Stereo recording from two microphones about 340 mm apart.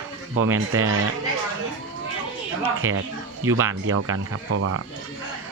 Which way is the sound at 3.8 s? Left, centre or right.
Right.